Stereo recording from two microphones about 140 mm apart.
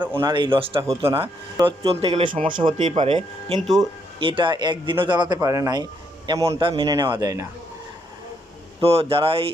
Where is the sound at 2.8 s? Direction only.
55° right (ahead or behind).